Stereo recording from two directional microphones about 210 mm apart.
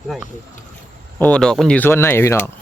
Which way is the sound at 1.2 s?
5° left (ahead or behind).